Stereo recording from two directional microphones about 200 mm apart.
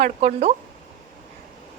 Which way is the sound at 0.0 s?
35° right (ahead or behind).